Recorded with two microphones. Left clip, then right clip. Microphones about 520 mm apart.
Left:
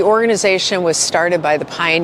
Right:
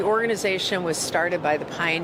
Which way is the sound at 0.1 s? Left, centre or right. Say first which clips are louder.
Left 9 dB; left.